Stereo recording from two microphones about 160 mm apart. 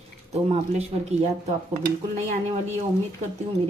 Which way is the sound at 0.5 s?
40° right (ahead or behind).